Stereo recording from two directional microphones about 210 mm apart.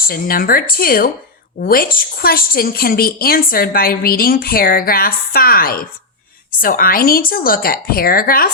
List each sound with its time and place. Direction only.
0.0 s a woman's voice: 45° left (ahead or behind)